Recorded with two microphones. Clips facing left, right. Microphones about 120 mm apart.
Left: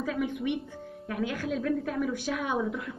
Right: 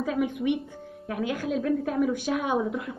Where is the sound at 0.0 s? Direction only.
15° right (ahead or behind).